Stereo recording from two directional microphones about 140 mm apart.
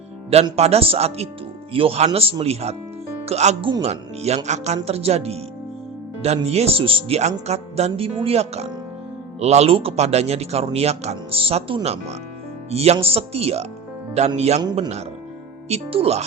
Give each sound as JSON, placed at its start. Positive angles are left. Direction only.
{"t": 0.5, "sound": "speech", "side_deg": -45}